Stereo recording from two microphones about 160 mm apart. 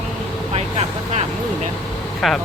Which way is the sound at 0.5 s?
40° right (ahead or behind).